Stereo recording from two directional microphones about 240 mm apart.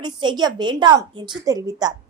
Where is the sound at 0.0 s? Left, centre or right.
Centre.